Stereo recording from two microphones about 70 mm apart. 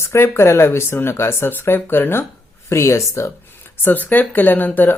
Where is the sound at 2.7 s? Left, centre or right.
Left.